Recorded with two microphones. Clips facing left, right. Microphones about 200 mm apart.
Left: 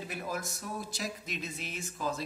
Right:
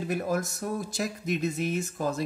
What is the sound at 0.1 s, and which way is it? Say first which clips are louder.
Speech: right 10 dB; 50° right (ahead or behind).